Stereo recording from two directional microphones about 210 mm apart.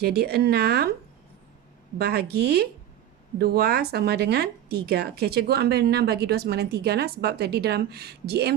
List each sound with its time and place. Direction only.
0.0 s speech: 50° right (ahead or behind)
2.0 s speech: 50° right (ahead or behind)